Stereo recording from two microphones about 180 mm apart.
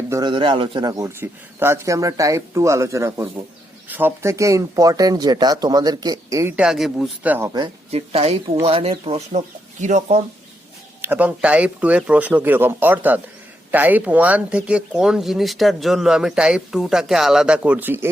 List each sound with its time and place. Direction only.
0.1 s a man's voice: 25° right (ahead or behind)
6.6 s a man's voice: centre (ahead or behind)
7.5 s speech: 30° right (ahead or behind)
11.0 s a man's voice: 10° right (ahead or behind)